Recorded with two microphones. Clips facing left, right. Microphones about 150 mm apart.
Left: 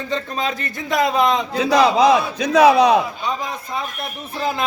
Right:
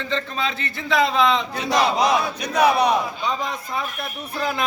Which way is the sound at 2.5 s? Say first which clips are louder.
Left 6 dB; 90° left.